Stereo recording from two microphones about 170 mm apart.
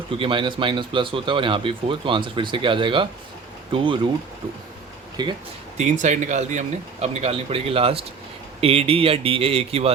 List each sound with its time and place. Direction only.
0.1 s speech: 30° right (ahead or behind)
5.2 s speech: 25° right (ahead or behind)
5.7 s speech: 45° right (ahead or behind)